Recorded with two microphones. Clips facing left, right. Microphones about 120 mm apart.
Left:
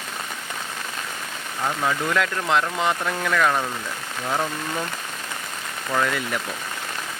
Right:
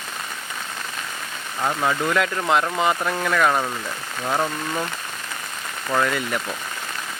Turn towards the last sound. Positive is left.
turn(degrees=-5)  # may be behind; listen again after turning